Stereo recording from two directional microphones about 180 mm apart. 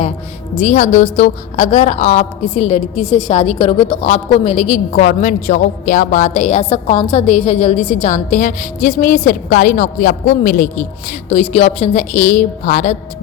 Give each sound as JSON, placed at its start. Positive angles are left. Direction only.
{"t": 0.5, "sound": "a woman's voice", "side_deg": 40}